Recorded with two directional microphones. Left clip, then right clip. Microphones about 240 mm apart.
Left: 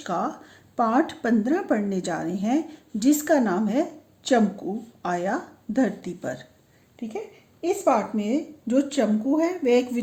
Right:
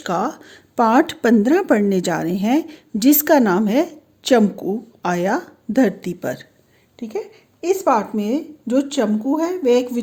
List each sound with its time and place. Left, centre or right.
0.0 s speech: right
7.6 s speech: right